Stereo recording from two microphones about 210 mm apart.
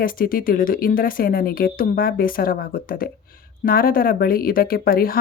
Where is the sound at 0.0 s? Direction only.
40° left (ahead or behind).